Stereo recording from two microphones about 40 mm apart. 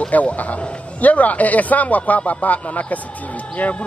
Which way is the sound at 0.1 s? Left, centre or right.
Left.